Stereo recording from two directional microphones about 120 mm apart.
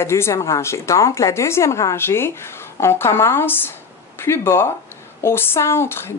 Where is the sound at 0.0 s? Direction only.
20° left (ahead or behind).